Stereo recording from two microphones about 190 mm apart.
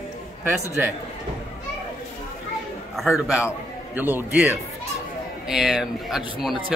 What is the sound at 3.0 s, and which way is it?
A man's voice, centre (ahead or behind).